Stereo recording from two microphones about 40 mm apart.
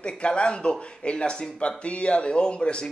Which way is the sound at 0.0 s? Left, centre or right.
Left.